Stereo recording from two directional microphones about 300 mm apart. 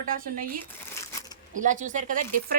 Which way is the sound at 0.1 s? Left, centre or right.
Right.